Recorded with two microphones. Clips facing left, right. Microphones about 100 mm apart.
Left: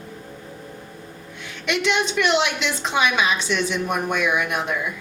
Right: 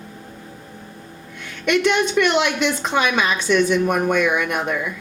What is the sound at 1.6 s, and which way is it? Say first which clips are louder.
A woman's voice: right 4 dB; 50° right (ahead or behind).